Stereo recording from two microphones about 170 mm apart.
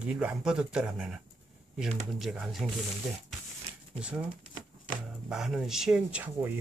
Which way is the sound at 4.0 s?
5° right (ahead or behind).